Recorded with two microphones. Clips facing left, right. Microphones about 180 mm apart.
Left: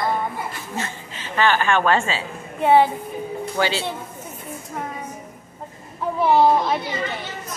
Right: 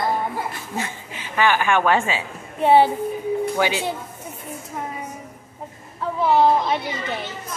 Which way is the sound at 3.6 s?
15° right (ahead or behind).